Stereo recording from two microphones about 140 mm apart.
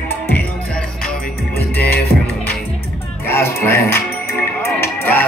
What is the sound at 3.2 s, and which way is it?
Music, 15° left (ahead or behind).